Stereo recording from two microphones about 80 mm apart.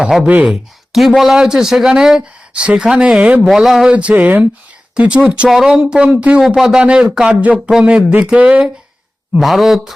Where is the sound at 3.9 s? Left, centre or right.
Centre.